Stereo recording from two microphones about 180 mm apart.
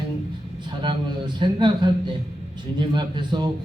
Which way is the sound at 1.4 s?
25° right (ahead or behind).